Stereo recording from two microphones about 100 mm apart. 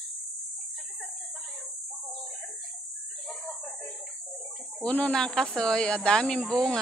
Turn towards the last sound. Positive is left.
turn(degrees=10)  # may be behind; listen again after turning